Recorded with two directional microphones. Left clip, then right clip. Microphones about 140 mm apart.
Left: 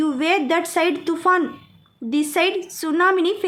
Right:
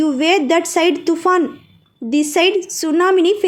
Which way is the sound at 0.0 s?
15° right (ahead or behind).